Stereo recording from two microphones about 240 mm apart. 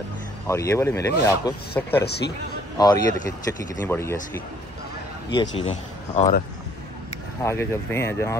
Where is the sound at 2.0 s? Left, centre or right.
Left.